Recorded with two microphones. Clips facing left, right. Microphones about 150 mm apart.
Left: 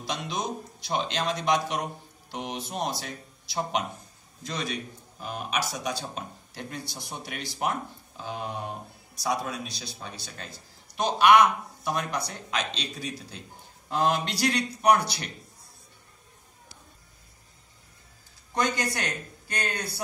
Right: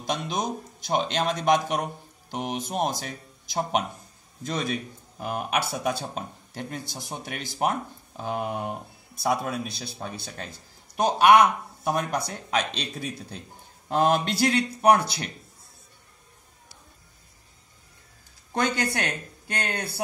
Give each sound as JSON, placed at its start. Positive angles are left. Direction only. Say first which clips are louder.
{"t": 0.0, "sound": "speech", "louder": "right 3 dB", "side_deg": -50}
{"t": 8.2, "sound": "speech", "louder": "right 5 dB", "side_deg": -55}
{"t": 19.4, "sound": "speech", "louder": "right 2 dB", "side_deg": -55}